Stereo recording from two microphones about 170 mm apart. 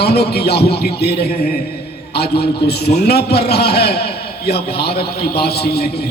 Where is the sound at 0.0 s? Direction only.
70° left (ahead or behind).